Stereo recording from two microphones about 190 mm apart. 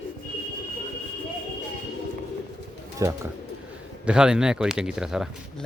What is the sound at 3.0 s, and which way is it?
Speech, 15° right (ahead or behind).